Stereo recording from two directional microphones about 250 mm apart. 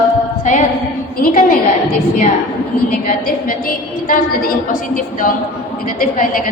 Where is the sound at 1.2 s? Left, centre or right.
Left.